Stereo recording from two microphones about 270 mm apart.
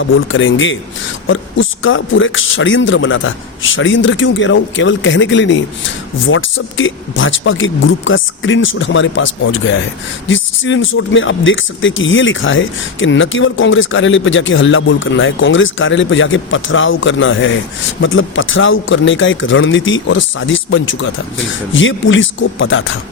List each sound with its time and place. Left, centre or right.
0.0 s speech: left